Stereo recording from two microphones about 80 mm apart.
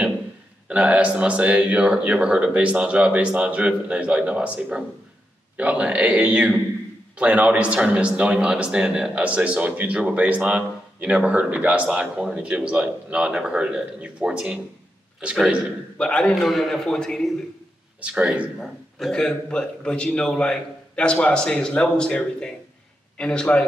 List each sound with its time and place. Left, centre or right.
0.7 s a man's voice: centre
16.0 s a man's voice: centre
16.4 s a man's voice: centre
18.0 s a man's voice: centre
18.6 s a man's voice: centre